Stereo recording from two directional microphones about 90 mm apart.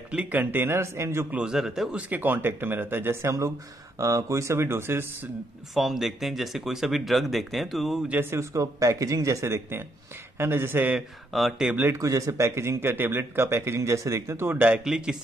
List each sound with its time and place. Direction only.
0.1 s a man's voice: 20° right (ahead or behind)
1.3 s speech: 10° right (ahead or behind)
2.0 s a man's voice: 20° right (ahead or behind)
5.8 s speech: centre (ahead or behind)
8.1 s a man's voice: 25° right (ahead or behind)
11.0 s speech: 5° right (ahead or behind)
11.7 s a man's voice: 25° right (ahead or behind)
12.0 s a man's voice: 35° right (ahead or behind); by 15.1 s 10° right (ahead or behind)